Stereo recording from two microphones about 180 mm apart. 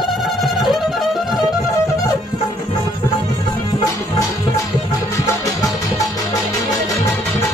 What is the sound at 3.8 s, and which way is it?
Music, 20° left (ahead or behind).